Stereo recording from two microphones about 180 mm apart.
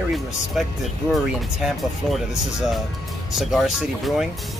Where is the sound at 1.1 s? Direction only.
Centre (ahead or behind).